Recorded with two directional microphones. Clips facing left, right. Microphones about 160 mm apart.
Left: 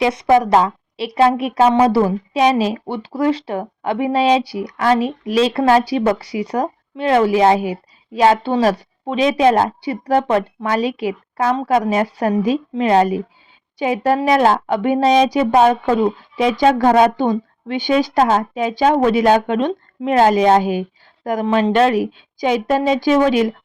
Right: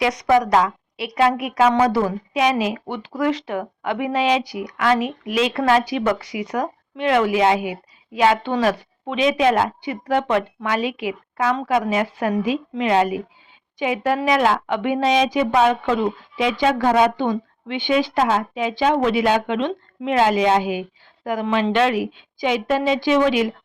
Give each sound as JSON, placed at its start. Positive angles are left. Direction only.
{"t": 0.0, "sound": "a woman's voice", "side_deg": 25}